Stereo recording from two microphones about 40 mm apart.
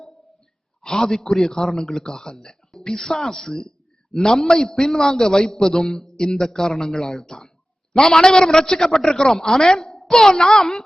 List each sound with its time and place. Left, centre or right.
0.8 s a man's voice: centre